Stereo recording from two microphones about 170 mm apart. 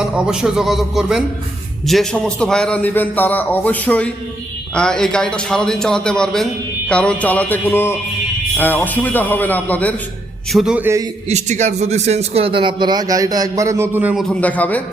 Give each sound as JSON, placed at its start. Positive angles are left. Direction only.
{"t": 0.0, "sound": "a man's voice", "side_deg": -5}
{"t": 10.5, "sound": "a man's voice", "side_deg": -5}
{"t": 11.3, "sound": "speech", "side_deg": -40}